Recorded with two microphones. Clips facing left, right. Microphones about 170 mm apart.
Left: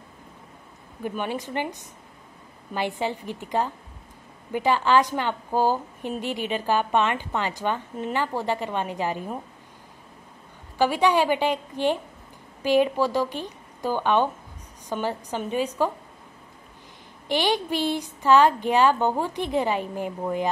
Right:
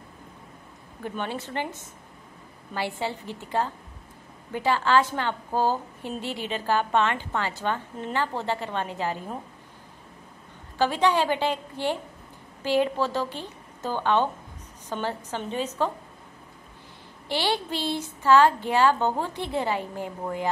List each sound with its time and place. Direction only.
1.0 s a woman's voice: 15° left (ahead or behind)
10.8 s a woman's voice: 10° left (ahead or behind)
17.3 s a woman's voice: 15° left (ahead or behind)